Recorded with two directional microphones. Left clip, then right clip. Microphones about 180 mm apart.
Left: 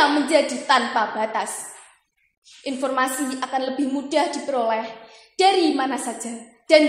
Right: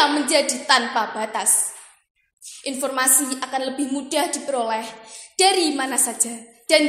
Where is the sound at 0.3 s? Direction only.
30° right (ahead or behind).